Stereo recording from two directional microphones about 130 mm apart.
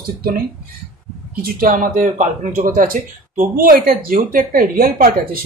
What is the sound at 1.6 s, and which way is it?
Speech, 90° right.